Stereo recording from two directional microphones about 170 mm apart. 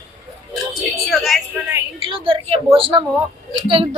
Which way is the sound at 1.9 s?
30° right (ahead or behind).